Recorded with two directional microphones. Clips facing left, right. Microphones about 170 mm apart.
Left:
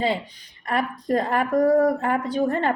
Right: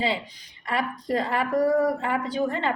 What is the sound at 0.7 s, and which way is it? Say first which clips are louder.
A woman's voice: left 3 dB; 50° left (ahead or behind).